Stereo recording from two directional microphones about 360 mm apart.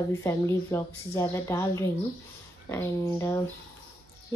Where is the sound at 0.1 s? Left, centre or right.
Centre.